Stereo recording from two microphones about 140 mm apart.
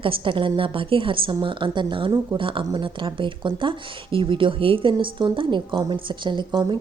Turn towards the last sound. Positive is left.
turn(degrees=-30)  # may be behind; listen again after turning